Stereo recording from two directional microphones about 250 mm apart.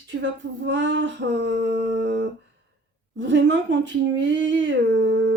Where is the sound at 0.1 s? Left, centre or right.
Right.